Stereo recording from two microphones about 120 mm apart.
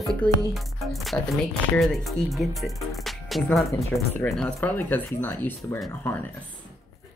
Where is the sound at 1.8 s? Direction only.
Centre (ahead or behind); by 6.3 s 15° left (ahead or behind).